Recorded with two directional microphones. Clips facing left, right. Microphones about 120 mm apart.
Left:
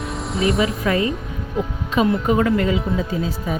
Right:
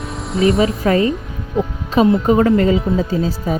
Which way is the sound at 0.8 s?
30° right (ahead or behind).